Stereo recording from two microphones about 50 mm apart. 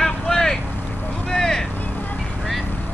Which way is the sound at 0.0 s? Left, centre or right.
Centre.